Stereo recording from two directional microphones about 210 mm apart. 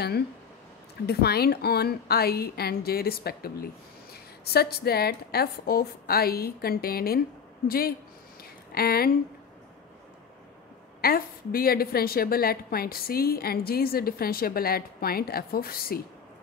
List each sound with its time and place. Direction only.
1.0 s a woman's voice: 50° left (ahead or behind)
11.0 s a woman's voice: 45° left (ahead or behind)